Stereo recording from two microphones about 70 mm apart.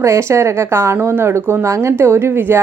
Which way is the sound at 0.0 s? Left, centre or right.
Right.